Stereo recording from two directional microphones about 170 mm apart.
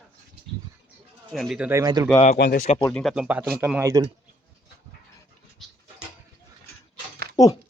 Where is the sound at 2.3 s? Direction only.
65° left (ahead or behind).